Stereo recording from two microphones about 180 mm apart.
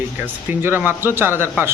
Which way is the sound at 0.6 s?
10° right (ahead or behind).